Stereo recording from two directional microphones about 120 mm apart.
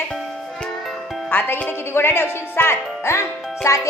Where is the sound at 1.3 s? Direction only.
15° left (ahead or behind).